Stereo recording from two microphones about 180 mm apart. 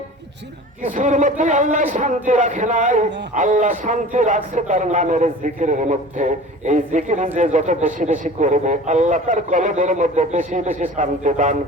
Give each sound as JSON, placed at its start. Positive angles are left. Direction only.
{"t": 0.9, "sound": "a man's voice", "side_deg": -45}